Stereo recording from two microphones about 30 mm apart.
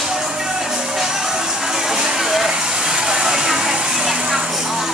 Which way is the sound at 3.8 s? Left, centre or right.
Centre.